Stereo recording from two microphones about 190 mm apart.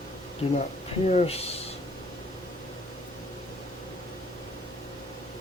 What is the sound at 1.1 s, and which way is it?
Speech, 35° left (ahead or behind).